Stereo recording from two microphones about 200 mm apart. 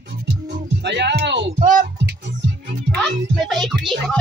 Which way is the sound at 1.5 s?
35° right (ahead or behind).